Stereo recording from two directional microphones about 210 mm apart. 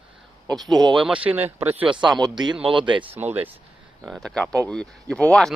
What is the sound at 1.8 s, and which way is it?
Speech, 25° right (ahead or behind).